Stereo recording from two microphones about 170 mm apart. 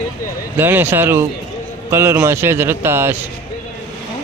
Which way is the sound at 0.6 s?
10° right (ahead or behind).